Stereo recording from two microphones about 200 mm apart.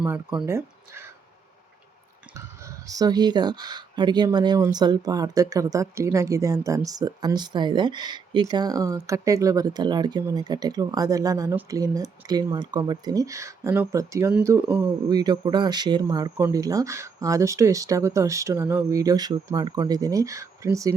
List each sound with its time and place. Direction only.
0.0 s speech: 5° right (ahead or behind)
2.3 s speech: 15° right (ahead or behind)